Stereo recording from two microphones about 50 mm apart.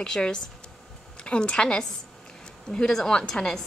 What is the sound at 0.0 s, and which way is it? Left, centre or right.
A woman's voice, centre.